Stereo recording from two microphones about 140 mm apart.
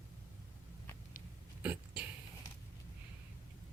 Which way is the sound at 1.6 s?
10° right (ahead or behind).